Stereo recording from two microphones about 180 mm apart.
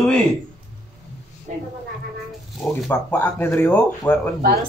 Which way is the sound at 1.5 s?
45° right (ahead or behind).